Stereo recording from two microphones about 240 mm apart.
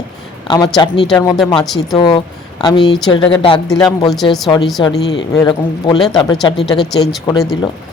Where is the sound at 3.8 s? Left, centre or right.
Centre.